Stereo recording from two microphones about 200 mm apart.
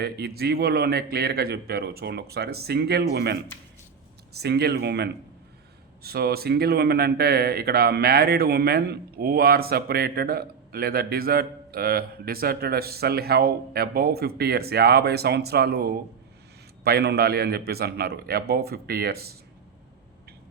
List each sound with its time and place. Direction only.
0.0 s speech: 55° right (ahead or behind)
4.4 s speech: 55° right (ahead or behind)